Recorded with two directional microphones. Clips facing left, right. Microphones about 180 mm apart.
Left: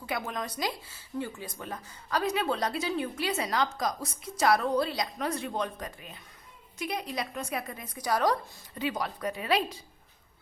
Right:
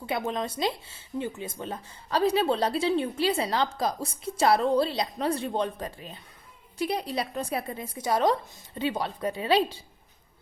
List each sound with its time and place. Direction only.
0.0 s speech: 25° right (ahead or behind)